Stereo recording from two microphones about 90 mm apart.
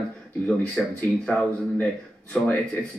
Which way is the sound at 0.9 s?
15° left (ahead or behind).